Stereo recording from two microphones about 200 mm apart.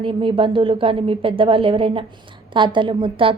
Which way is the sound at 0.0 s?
25° right (ahead or behind).